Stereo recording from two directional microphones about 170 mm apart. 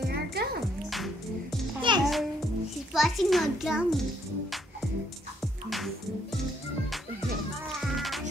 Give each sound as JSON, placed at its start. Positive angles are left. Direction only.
{"t": 0.1, "sound": "music", "side_deg": -65}
{"t": 0.8, "sound": "music", "side_deg": 0}
{"t": 1.8, "sound": "music", "side_deg": -25}
{"t": 2.9, "sound": "a child's voice", "side_deg": 0}
{"t": 5.4, "sound": "music", "side_deg": 0}
{"t": 7.8, "sound": "music", "side_deg": 0}